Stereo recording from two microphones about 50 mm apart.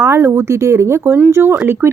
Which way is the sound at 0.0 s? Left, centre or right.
Right.